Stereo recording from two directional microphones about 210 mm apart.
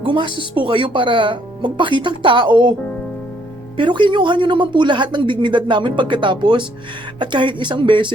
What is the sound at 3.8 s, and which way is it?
Speech, 20° right (ahead or behind).